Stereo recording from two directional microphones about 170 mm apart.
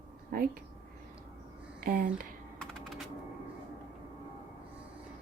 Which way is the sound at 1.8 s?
55° right (ahead or behind).